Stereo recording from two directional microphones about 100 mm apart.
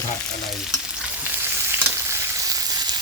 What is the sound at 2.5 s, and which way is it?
Sizzle, 40° right (ahead or behind).